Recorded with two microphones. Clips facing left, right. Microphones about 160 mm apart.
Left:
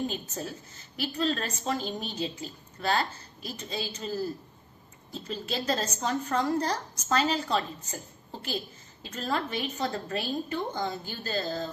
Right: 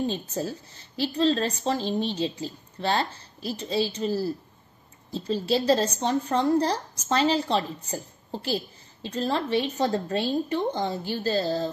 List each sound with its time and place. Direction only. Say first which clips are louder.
0.0 s a woman's voice: right 5 dB; 30° right (ahead or behind)